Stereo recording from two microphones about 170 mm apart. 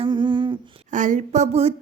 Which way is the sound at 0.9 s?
50° right (ahead or behind).